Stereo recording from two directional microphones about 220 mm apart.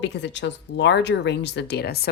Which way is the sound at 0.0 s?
55° left (ahead or behind).